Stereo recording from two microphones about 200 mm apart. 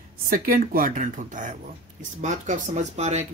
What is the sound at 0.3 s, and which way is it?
A woman's voice, 45° right (ahead or behind).